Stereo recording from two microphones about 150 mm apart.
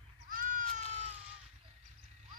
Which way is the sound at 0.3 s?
65° right (ahead or behind).